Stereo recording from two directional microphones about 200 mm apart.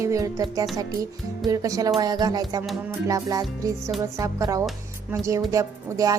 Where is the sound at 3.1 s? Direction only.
15° right (ahead or behind).